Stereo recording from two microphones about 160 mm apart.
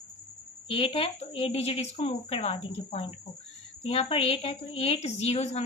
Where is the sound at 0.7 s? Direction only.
35° left (ahead or behind).